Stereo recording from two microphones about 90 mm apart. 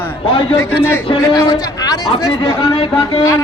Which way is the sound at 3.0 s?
75° left (ahead or behind).